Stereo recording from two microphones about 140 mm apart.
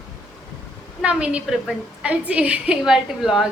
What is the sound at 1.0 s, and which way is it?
A woman's voice, 10° right (ahead or behind).